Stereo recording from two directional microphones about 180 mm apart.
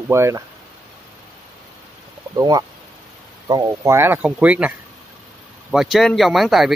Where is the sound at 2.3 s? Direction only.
20° right (ahead or behind).